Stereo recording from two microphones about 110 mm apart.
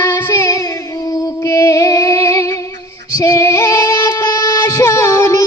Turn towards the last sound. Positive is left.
turn(degrees=30)  # may be behind; listen again after turning